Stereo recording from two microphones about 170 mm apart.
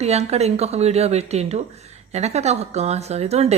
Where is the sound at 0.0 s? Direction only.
40° right (ahead or behind).